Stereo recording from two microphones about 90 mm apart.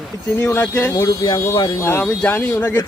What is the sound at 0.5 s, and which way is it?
Speech, 25° left (ahead or behind).